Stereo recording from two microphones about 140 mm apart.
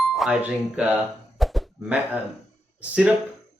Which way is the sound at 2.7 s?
10° right (ahead or behind).